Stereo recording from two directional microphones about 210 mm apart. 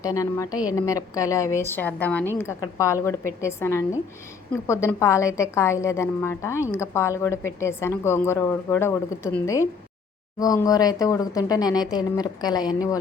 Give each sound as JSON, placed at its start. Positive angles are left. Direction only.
{"t": 0.0, "sound": "a woman's voice", "side_deg": 15}